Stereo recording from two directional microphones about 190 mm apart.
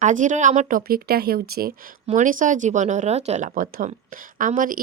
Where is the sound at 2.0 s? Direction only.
45° right (ahead or behind).